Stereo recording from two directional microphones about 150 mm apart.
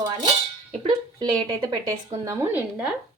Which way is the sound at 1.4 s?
30° right (ahead or behind).